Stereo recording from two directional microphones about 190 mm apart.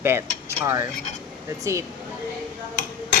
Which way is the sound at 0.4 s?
15° right (ahead or behind).